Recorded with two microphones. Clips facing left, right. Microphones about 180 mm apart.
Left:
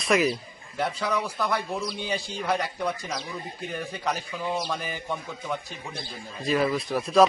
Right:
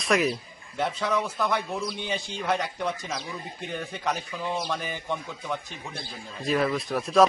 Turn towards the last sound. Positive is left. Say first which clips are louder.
# left 1 dB
turn(degrees=0)  # may be behind; listen again after turning